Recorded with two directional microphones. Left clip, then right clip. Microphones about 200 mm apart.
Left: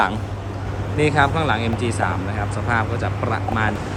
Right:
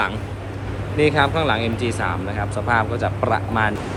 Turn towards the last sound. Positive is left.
turn(degrees=0)  # may be behind; listen again after turning